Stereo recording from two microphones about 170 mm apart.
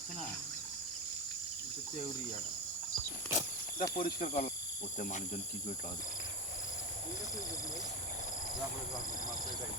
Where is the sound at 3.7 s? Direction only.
55° left (ahead or behind).